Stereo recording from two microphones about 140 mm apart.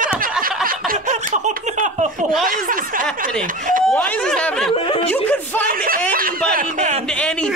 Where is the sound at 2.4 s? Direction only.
80° right.